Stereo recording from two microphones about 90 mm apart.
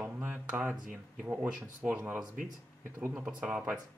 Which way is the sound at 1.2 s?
20° right (ahead or behind).